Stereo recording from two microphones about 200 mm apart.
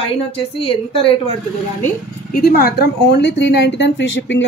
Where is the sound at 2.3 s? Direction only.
50° left (ahead or behind).